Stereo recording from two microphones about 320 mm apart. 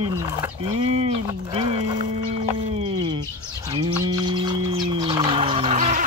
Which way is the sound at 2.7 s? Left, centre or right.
Centre.